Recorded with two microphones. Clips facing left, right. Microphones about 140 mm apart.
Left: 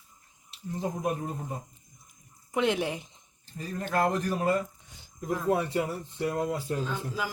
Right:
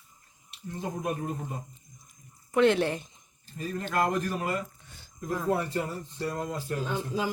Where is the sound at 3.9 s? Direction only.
30° left (ahead or behind).